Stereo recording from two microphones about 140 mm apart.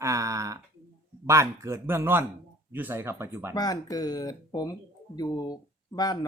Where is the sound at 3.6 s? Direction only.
25° left (ahead or behind).